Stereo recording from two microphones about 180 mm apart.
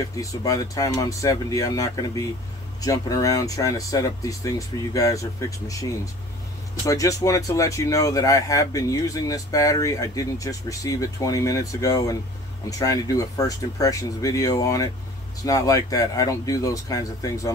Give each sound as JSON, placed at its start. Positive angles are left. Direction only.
{"t": 0.2, "sound": "speech", "side_deg": 20}
{"t": 6.9, "sound": "speech", "side_deg": 20}